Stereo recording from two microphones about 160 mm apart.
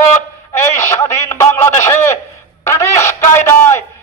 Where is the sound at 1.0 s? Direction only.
15° left (ahead or behind).